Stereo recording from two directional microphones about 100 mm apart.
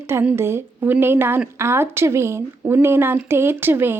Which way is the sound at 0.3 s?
25° right (ahead or behind).